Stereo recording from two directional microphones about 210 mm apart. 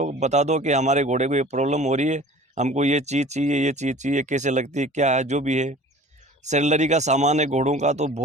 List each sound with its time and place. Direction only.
0.0 s speech: 35° right (ahead or behind)